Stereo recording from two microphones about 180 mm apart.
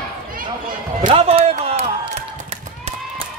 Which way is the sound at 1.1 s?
35° right (ahead or behind).